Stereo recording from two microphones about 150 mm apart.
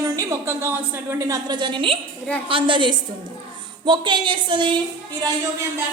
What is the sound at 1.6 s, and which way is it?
A woman's voice, 35° right (ahead or behind).